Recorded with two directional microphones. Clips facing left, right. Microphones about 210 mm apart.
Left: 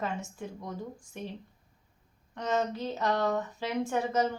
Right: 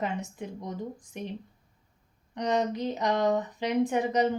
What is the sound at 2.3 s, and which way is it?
A woman's voice, 15° right (ahead or behind).